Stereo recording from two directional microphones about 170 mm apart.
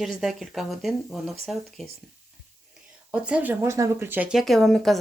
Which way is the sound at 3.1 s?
5° right (ahead or behind).